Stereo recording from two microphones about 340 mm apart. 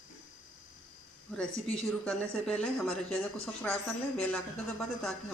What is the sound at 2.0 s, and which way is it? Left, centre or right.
Speech, centre.